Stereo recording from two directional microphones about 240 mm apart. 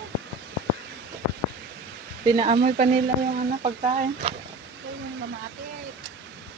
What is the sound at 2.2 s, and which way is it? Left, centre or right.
Speech, centre.